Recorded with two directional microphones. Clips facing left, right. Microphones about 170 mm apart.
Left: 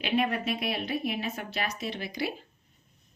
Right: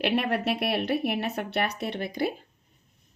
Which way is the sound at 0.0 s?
70° right (ahead or behind).